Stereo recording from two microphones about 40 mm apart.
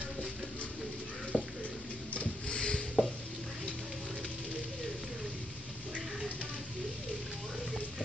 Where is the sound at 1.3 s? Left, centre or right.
Left.